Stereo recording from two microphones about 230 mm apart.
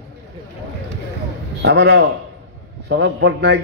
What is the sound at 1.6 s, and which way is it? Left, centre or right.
A man's voice, right.